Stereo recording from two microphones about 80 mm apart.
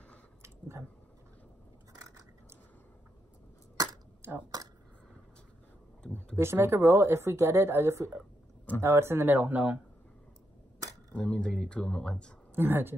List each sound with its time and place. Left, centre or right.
0.4 s chewing: right
3.7 s a sound: right
6.1 s speech: right
11.1 s speech: centre
12.5 s speech: right